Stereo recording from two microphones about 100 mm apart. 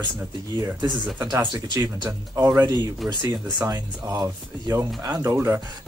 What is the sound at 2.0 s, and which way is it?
Speech, 30° right (ahead or behind).